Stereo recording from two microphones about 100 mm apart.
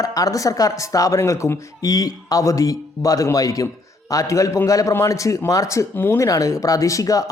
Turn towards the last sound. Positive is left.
turn(degrees=35)  # may be behind; listen again after turning